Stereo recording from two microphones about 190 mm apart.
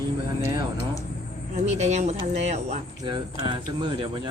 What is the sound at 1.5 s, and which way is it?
Speech, 35° right (ahead or behind).